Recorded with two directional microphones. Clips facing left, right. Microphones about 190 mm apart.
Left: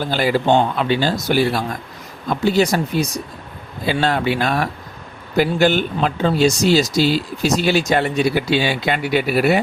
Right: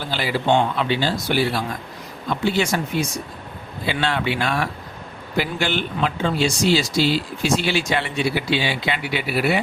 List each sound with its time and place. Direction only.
0.0 s speech: 45° left (ahead or behind)